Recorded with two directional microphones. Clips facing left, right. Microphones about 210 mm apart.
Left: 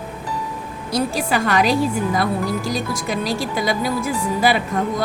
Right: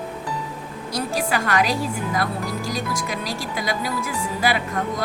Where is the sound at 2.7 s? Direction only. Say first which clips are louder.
Left 4 dB; 25° left (ahead or behind).